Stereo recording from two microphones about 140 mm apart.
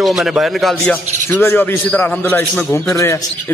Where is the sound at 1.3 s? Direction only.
15° left (ahead or behind).